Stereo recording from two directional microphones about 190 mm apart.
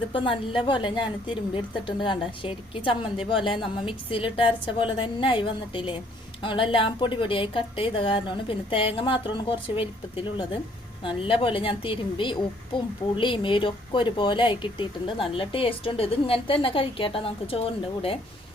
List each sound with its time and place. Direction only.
0.1 s a woman's voice: 25° left (ahead or behind)